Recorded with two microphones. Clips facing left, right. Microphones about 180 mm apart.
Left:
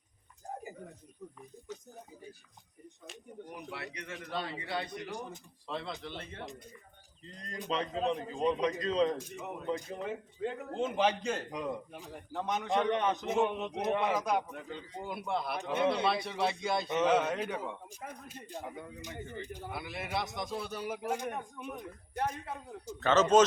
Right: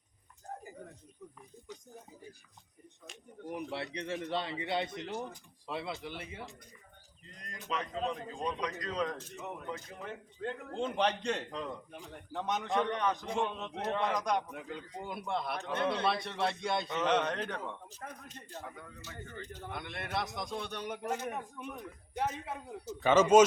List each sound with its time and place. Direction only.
3.9 s a man's voice: 30° right (ahead or behind)
5.6 s speech: 10° right (ahead or behind)
7.3 s a man's voice: 30° left (ahead or behind)
9.1 s a man's voice: 10° left (ahead or behind)
9.7 s a man's voice: 25° left (ahead or behind)
10.0 s a man's voice: 5° left (ahead or behind)
12.9 s a man's voice: 20° left (ahead or behind)
22.2 s a man's voice: 5° right (ahead or behind)